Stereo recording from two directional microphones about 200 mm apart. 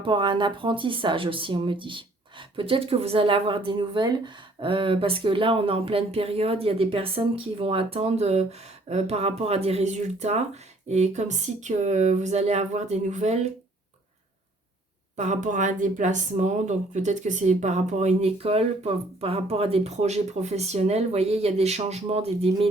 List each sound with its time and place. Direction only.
0.0 s speech: 25° right (ahead or behind)
15.1 s speech: 35° right (ahead or behind)